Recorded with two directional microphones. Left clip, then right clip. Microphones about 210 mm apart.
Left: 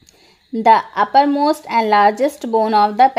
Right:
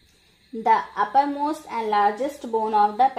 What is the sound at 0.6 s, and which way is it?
Speech, 50° left (ahead or behind).